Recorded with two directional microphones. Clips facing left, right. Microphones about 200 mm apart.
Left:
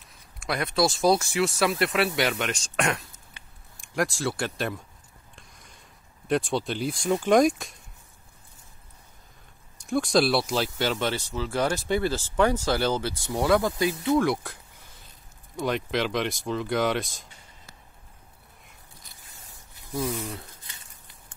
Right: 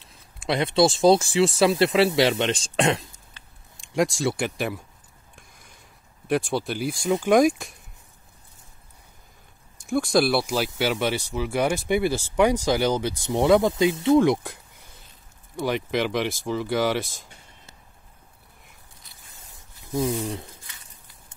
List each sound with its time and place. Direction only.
0.0 s speech: 25° right (ahead or behind); by 4.8 s 10° right (ahead or behind)
6.2 s speech: 5° right (ahead or behind)
9.8 s speech: centre (ahead or behind); by 15.0 s 20° right (ahead or behind)
15.5 s speech: 5° right (ahead or behind)
20.0 s speech: 30° right (ahead or behind)